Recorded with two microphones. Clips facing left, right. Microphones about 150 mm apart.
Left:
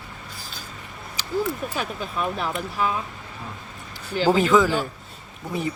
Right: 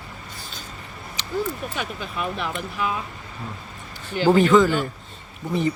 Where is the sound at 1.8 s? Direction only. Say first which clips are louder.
Left 1 dB; 40° left (ahead or behind).